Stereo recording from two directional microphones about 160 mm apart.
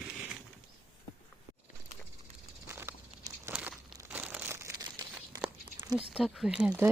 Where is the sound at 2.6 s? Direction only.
15° right (ahead or behind).